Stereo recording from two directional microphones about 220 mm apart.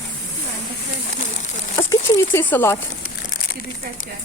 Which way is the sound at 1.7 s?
10° left (ahead or behind).